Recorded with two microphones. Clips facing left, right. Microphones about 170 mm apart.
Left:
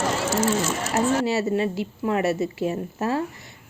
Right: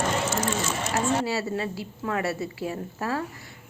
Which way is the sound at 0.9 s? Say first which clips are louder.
Left 4 dB; 20° left (ahead or behind).